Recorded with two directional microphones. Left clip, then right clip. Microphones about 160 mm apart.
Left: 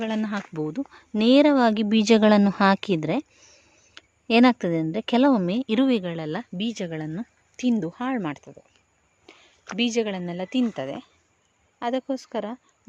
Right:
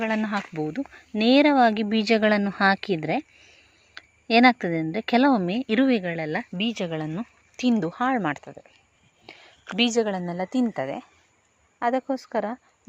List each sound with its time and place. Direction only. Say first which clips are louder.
0.0 s a woman's voice: right 3 dB; 35° left (ahead or behind); by 8.5 s 15° left (ahead or behind)
9.2 s a sound: right 5 dB; 15° left (ahead or behind)
9.7 s a woman's voice: right 2 dB; 10° left (ahead or behind)